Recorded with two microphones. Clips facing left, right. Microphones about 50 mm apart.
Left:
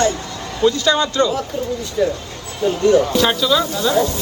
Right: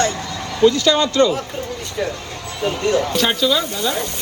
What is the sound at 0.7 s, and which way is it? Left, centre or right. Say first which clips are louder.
Speech: right 1 dB; left.